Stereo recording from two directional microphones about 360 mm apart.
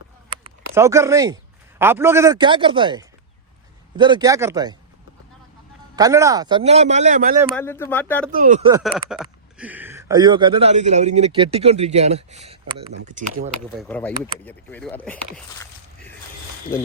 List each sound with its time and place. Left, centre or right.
0.7 s speech: centre
6.0 s speech: centre
7.5 s speech: centre
8.3 s speech: right
8.8 s speech: centre; by 13.5 s right
13.7 s speech: centre